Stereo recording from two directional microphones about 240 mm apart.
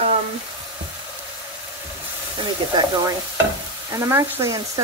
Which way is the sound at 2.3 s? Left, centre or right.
Centre.